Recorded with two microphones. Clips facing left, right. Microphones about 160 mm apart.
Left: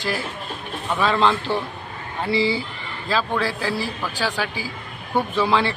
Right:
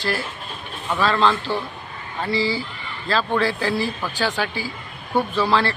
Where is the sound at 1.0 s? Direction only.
15° left (ahead or behind).